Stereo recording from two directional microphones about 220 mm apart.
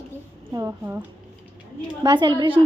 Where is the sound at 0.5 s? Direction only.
15° right (ahead or behind).